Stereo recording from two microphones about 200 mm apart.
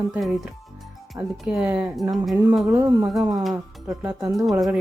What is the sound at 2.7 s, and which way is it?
Speech, 15° right (ahead or behind).